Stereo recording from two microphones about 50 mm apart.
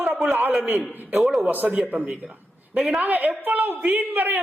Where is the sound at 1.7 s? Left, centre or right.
Right.